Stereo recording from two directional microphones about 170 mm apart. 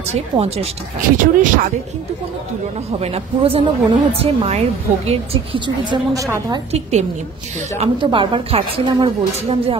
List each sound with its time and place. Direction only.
0.1 s a woman's voice: 35° right (ahead or behind)
1.1 s speech: 55° right (ahead or behind)
3.0 s a woman's voice: 35° right (ahead or behind)
6.1 s a woman's voice: 20° right (ahead or behind)
6.7 s a woman's voice: 40° right (ahead or behind)